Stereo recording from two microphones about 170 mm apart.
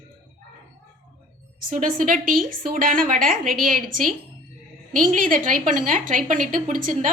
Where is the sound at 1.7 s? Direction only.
55° right (ahead or behind).